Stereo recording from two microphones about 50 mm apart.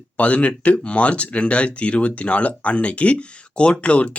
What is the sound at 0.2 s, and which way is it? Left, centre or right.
Speech, left.